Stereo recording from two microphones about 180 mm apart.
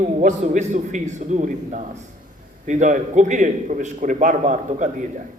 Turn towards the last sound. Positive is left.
turn(degrees=-40)  # may be behind; listen again after turning